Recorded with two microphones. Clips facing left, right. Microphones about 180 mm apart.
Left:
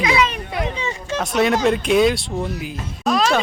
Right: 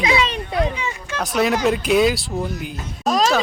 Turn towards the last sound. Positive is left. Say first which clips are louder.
# even
turn(degrees=-40)  # may be behind; listen again after turning